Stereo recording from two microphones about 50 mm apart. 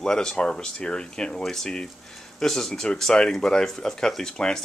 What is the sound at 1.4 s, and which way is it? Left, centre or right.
Speech, centre.